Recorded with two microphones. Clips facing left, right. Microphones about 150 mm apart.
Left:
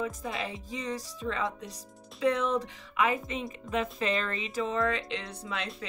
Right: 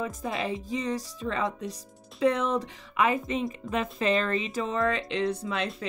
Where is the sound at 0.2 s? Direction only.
30° right (ahead or behind).